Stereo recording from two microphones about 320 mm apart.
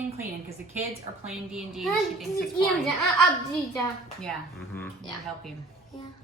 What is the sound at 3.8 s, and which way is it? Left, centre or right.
A woman's voice, centre.